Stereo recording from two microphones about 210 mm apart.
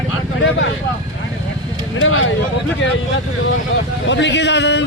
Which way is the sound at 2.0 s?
75° left (ahead or behind).